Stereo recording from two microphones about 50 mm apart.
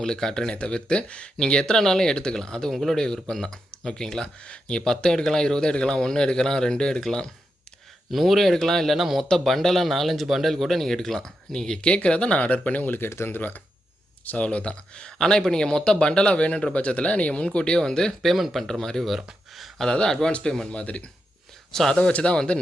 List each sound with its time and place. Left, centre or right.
0.0 s speech: centre
0.5 s speech: left
8.1 s speech: centre
9.0 s speech: centre
9.2 s speech: centre; by 13.0 s left
13.1 s speech: left
14.3 s speech: left
21.7 s speech: centre
21.9 s speech: left